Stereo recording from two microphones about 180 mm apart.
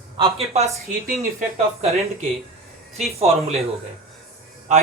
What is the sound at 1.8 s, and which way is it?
A man's voice, 35° right (ahead or behind).